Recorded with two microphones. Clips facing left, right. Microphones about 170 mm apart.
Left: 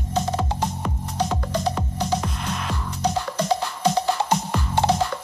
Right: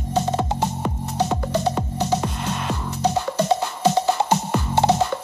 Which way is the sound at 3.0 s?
25° right (ahead or behind).